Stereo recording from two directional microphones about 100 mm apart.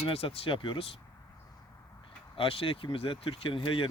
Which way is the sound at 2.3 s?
65° left (ahead or behind).